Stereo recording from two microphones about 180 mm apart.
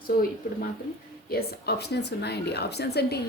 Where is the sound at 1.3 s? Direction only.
60° left (ahead or behind).